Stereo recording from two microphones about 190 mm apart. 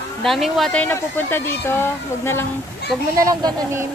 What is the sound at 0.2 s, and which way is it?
Speech, centre (ahead or behind).